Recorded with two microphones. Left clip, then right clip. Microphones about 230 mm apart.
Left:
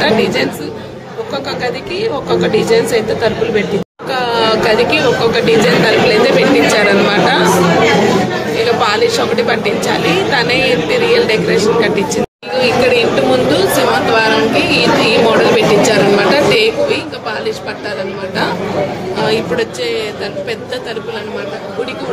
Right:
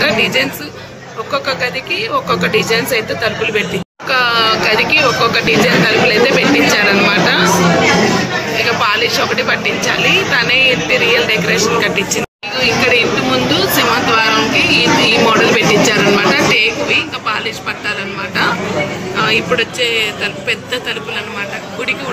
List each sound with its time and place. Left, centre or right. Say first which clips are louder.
0.0 s chatter: even; centre
1.3 s speech: right 2 dB; centre
8.6 s speech: left 2 dB; centre
19.1 s speech: right 2 dB; centre